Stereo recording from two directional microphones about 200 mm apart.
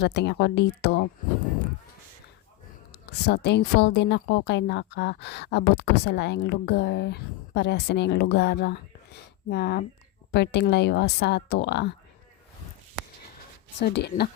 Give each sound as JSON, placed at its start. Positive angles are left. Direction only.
{"t": 0.0, "sound": "a woman's voice", "side_deg": 55}
{"t": 2.9, "sound": "a woman's voice", "side_deg": 55}
{"t": 13.7, "sound": "speech", "side_deg": 50}